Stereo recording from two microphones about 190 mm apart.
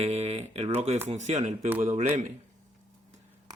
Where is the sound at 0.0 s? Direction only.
35° right (ahead or behind).